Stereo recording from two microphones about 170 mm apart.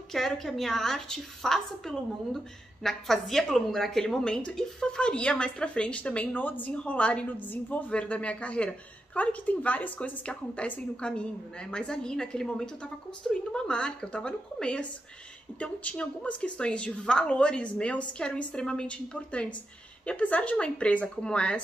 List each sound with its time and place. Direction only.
0.1 s a woman's voice: centre (ahead or behind)